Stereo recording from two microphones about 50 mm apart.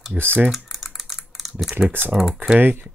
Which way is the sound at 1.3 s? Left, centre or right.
Centre.